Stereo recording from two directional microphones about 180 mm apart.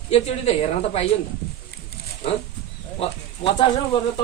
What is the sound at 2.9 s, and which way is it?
Speech, 30° left (ahead or behind).